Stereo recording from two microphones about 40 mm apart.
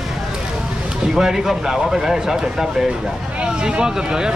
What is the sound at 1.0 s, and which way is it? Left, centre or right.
Speech, centre.